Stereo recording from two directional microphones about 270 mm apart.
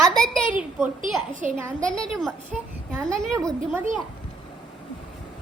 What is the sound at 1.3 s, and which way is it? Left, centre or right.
Speech, right.